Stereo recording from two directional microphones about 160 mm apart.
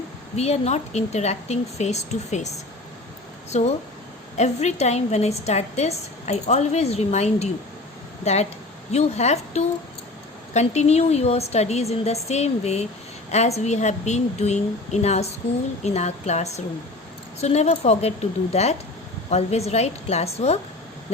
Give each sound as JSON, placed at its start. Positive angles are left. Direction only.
{"t": 0.3, "sound": "a woman's voice", "side_deg": 40}
{"t": 3.5, "sound": "a woman's voice", "side_deg": 40}